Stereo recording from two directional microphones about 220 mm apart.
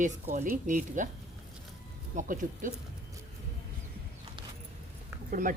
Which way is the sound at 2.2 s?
35° right (ahead or behind).